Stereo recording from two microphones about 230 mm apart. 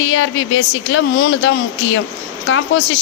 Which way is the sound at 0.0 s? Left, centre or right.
Left.